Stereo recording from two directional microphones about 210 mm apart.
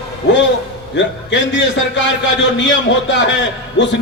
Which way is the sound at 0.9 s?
60° left (ahead or behind).